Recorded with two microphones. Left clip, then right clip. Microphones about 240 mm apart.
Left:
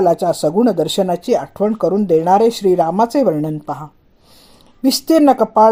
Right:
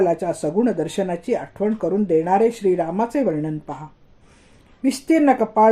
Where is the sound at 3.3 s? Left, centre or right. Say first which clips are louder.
Left 6 dB; left.